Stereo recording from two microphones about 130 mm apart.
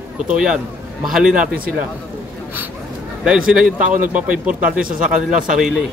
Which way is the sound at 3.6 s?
90° right.